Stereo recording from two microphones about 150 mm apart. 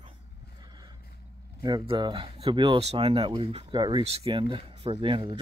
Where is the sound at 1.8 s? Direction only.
30° right (ahead or behind).